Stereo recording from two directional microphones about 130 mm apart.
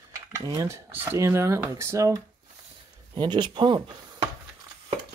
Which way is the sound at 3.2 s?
35° right (ahead or behind).